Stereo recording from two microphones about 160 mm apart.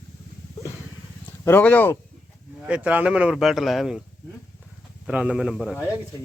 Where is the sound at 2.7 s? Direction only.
10° right (ahead or behind).